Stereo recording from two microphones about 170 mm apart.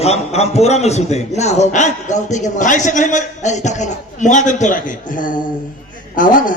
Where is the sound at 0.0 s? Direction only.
40° left (ahead or behind).